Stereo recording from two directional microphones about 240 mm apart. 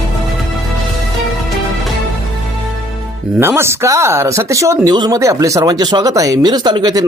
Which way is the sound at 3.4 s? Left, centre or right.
Centre.